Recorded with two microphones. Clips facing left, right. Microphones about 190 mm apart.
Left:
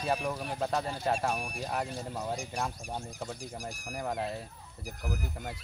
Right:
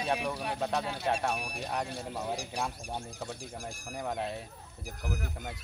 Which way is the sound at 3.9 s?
Centre (ahead or behind).